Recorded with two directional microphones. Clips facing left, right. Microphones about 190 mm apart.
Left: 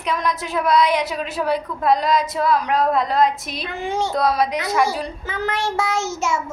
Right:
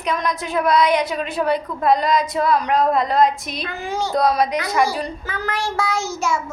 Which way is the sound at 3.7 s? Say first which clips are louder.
Left 2 dB; 25° left (ahead or behind).